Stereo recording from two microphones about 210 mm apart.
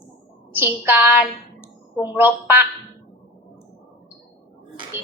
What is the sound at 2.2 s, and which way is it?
Speech, 10° right (ahead or behind).